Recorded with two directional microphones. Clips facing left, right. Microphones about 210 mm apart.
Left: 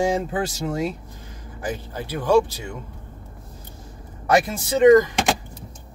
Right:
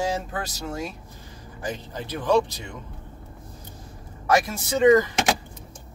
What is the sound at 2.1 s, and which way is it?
Speech, 10° left (ahead or behind).